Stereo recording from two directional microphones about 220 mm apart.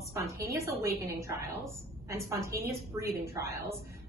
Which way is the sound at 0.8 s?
15° right (ahead or behind).